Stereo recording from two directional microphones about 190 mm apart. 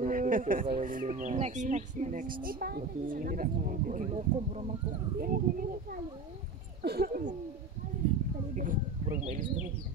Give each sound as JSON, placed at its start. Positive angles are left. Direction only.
{"t": 0.0, "sound": "speech", "side_deg": -45}
{"t": 5.2, "sound": "speech", "side_deg": -50}
{"t": 8.5, "sound": "speech", "side_deg": -45}